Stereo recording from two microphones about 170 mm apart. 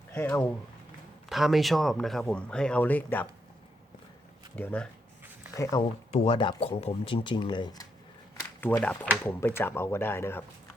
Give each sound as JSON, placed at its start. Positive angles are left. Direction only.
{"t": 0.1, "sound": "speech", "side_deg": 15}
{"t": 1.3, "sound": "speech", "side_deg": 0}
{"t": 4.5, "sound": "speech", "side_deg": 10}
{"t": 5.7, "sound": "speech", "side_deg": 25}
{"t": 8.6, "sound": "speech", "side_deg": 10}